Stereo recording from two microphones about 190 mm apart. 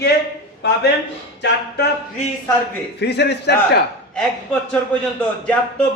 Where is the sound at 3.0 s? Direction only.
60° left (ahead or behind).